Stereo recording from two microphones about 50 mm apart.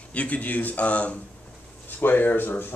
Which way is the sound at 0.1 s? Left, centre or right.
Left.